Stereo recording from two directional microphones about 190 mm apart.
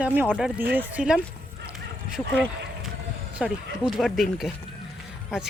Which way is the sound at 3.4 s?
5° right (ahead or behind).